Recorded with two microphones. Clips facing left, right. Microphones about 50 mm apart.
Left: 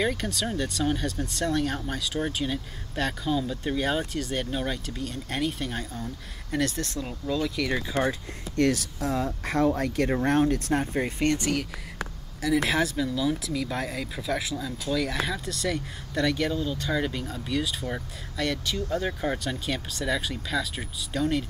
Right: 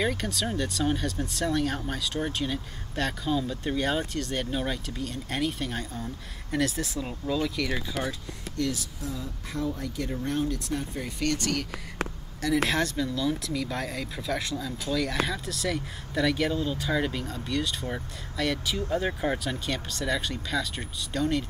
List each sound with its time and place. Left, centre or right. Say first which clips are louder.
0.0 s speech: left 1 dB; centre
8.5 s speech: left 7 dB; left; by 11.6 s centre
12.6 s speech: left 2 dB; centre